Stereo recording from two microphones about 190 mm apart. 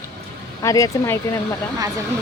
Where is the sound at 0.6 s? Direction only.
15° left (ahead or behind).